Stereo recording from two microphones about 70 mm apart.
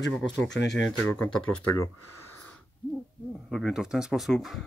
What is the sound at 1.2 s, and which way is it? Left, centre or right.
Speech, centre.